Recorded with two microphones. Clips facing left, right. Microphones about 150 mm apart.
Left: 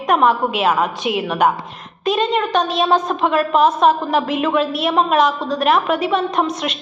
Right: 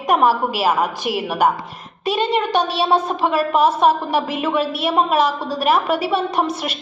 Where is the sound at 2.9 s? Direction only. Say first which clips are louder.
Left 1 dB; 5° right (ahead or behind).